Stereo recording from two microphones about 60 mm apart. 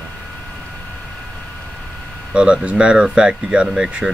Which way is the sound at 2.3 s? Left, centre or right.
Centre.